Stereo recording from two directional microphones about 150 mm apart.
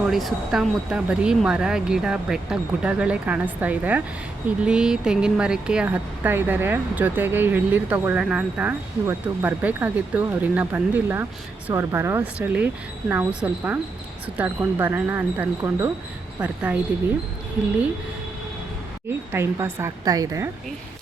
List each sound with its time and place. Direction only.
0.0 s speech: centre (ahead or behind)
19.3 s a woman's voice: 15° right (ahead or behind)